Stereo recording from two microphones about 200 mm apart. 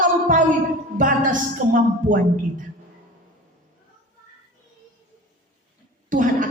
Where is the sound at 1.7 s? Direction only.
40° right (ahead or behind).